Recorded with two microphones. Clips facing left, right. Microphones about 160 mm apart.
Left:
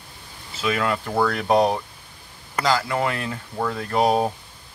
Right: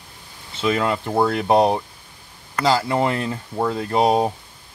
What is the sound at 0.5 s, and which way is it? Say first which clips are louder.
Speech: right 3 dB; 25° right (ahead or behind).